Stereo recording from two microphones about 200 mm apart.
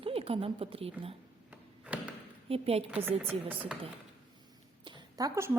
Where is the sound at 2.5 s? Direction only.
30° right (ahead or behind).